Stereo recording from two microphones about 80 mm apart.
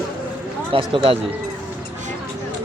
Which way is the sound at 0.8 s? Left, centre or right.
Right.